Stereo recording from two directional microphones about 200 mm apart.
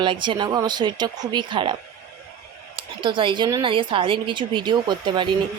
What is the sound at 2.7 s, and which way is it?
Speech, 25° right (ahead or behind).